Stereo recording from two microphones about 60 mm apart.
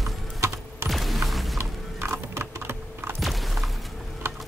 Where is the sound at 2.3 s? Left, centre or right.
Right.